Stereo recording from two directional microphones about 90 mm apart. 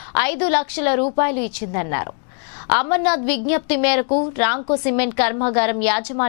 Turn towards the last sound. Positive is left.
turn(degrees=15)  # may be behind; listen again after turning